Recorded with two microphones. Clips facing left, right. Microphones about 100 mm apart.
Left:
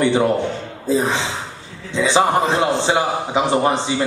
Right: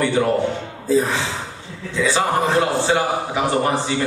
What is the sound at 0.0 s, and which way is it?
A man's voice, 20° left (ahead or behind).